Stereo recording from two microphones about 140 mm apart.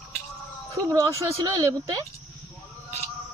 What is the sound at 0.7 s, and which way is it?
A woman's voice, 25° right (ahead or behind).